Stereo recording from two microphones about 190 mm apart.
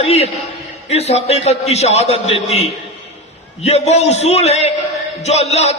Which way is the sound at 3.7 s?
35° left (ahead or behind).